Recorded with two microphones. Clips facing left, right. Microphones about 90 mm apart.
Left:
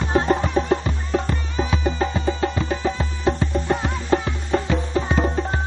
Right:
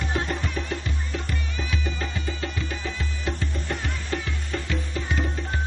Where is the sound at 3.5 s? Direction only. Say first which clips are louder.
Left 9 dB; 60° left (ahead or behind).